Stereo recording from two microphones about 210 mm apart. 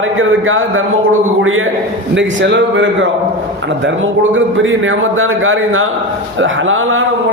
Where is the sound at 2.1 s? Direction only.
60° right (ahead or behind).